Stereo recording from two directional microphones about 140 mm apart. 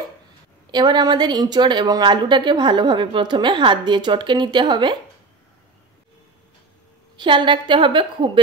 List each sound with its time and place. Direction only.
0.7 s speech: 30° right (ahead or behind)
7.2 s speech: 35° right (ahead or behind)